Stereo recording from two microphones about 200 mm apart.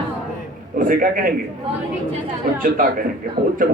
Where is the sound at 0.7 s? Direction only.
45° right (ahead or behind).